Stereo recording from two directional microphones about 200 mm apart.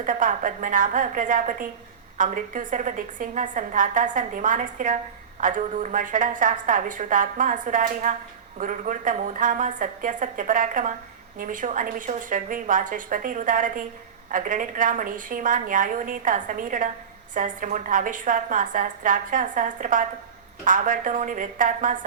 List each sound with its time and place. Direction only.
0.0 s a woman's voice: 40° right (ahead or behind)